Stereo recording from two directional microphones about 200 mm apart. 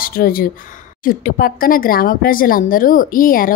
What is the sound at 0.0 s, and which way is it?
A woman's voice, 50° left (ahead or behind).